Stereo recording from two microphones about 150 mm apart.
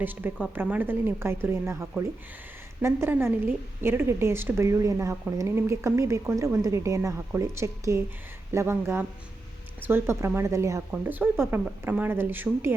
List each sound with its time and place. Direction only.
0.0 s a woman's voice: 15° right (ahead or behind)